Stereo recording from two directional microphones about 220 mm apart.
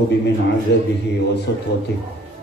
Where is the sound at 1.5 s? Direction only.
50° left (ahead or behind).